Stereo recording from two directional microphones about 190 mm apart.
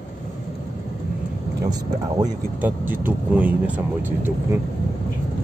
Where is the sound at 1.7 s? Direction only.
20° right (ahead or behind).